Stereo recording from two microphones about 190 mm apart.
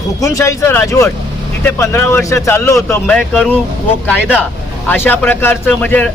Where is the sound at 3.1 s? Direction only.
Centre (ahead or behind).